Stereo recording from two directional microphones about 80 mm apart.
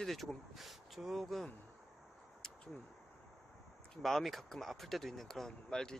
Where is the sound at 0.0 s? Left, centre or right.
Centre.